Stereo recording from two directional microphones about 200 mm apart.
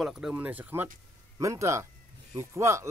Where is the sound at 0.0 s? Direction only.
Centre (ahead or behind).